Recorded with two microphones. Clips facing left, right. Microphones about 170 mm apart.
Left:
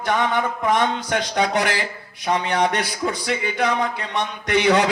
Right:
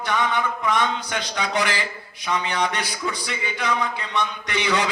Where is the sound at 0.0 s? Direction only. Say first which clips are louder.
Left 3 dB; 50° left (ahead or behind).